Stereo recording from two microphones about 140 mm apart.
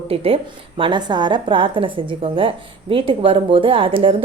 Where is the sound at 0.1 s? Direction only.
45° right (ahead or behind).